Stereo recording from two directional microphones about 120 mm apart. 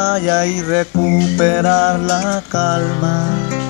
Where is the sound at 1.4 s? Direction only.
15° right (ahead or behind).